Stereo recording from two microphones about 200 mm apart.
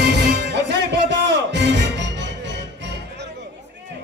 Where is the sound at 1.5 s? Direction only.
60° right (ahead or behind).